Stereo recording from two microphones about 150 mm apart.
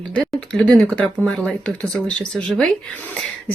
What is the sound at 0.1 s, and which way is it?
Speech, 10° left (ahead or behind).